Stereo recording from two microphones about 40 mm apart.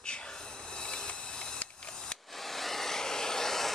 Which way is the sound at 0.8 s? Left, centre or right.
Left.